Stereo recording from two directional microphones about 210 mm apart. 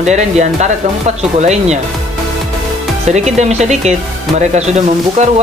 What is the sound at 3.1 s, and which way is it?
Speech, 35° right (ahead or behind).